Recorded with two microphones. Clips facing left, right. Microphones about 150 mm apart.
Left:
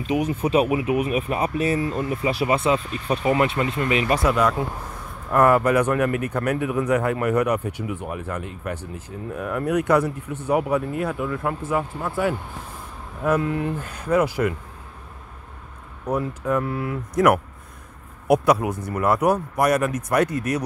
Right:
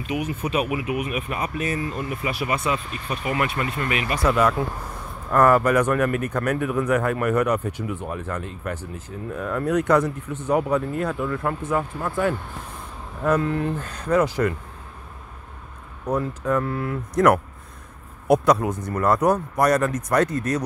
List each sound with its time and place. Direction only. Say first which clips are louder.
0.0 s speech: left 4 dB; 30° left (ahead or behind)
4.3 s speech: right 3 dB; 5° right (ahead or behind)
5.3 s speech: even; 15° left (ahead or behind)
16.1 s speech: even; 15° left (ahead or behind)